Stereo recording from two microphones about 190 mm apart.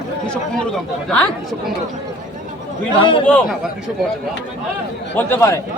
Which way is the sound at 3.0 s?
25° left (ahead or behind).